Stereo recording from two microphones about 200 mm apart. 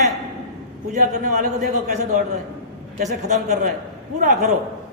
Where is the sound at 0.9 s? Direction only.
40° right (ahead or behind).